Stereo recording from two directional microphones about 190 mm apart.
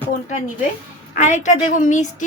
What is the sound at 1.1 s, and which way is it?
Speech, 40° left (ahead or behind).